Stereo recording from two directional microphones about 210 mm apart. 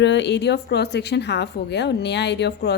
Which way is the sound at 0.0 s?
55° left (ahead or behind).